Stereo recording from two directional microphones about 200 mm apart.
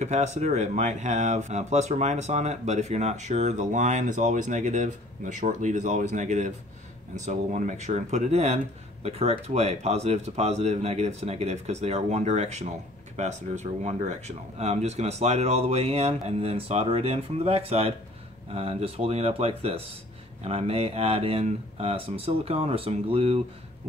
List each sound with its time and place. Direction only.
0.0 s speech: 35° right (ahead or behind)